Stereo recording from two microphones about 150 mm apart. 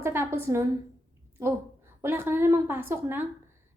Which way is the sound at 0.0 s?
15° right (ahead or behind).